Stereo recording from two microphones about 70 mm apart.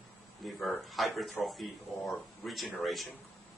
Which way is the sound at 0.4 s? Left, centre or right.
Centre.